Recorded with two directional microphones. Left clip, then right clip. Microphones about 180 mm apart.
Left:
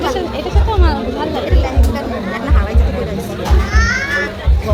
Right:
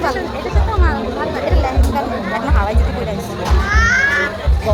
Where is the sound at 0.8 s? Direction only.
30° left (ahead or behind).